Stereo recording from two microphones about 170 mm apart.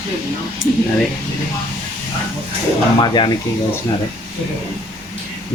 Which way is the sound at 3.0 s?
30° left (ahead or behind).